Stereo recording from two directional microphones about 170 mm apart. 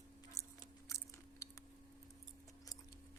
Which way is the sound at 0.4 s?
20° left (ahead or behind).